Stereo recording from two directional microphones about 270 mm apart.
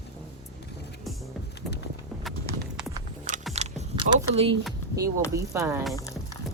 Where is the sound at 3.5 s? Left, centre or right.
Right.